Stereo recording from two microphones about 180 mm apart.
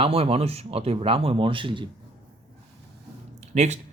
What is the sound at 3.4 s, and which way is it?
Speech, 40° right (ahead or behind).